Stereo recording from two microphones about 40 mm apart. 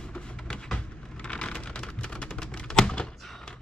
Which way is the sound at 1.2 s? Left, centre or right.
Left.